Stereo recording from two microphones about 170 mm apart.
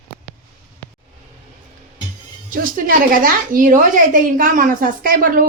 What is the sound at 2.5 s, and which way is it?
A woman's voice, 55° right (ahead or behind).